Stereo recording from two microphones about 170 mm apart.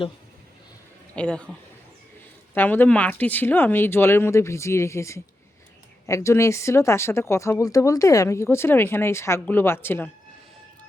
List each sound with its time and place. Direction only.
1.1 s speech: 5° left (ahead or behind)
2.6 s speech: 10° left (ahead or behind)